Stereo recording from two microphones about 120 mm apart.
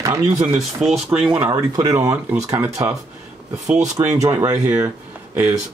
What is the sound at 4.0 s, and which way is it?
Speech, 35° right (ahead or behind).